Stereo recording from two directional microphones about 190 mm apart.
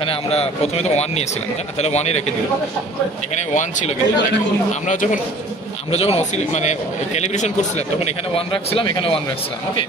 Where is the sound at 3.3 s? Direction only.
40° left (ahead or behind).